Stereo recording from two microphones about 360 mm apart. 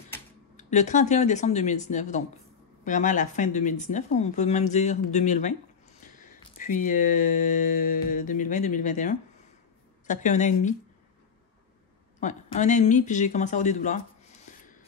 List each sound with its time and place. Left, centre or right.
0.6 s speech: centre
12.2 s speech: centre